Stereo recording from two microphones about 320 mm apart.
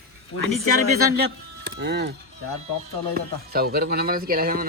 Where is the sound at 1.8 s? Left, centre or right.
Right.